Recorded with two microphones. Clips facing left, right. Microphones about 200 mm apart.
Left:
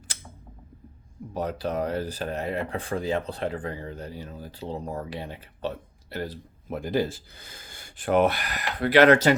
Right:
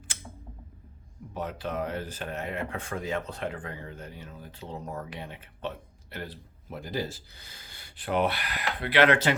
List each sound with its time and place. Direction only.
1.3 s speech: 40° left (ahead or behind)